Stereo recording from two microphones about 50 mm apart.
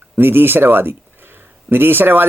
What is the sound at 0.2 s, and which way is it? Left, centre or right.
Speech, right.